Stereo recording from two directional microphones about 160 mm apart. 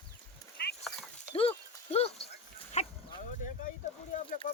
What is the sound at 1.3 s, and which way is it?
Horse, 40° left (ahead or behind).